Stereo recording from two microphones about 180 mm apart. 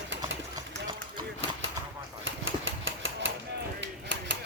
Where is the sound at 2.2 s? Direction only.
90° right.